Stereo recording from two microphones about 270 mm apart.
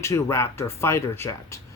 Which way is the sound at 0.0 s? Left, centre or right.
Centre.